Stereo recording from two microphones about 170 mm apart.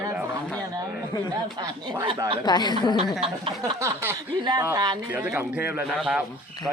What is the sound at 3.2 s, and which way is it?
Speech, 35° right (ahead or behind).